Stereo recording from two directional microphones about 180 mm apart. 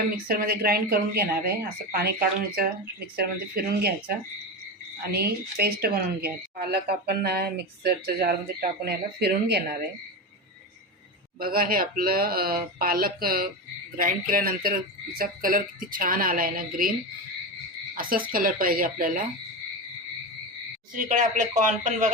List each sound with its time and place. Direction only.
0.3 s speech: 55° right (ahead or behind)
5.1 s speech: 60° right (ahead or behind)
11.3 s a woman's voice: 55° right (ahead or behind)
17.9 s a woman's voice: 55° right (ahead or behind)
20.9 s a woman's voice: 45° right (ahead or behind)